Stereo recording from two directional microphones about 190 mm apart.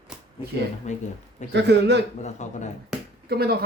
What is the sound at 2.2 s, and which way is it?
Speech, 40° left (ahead or behind).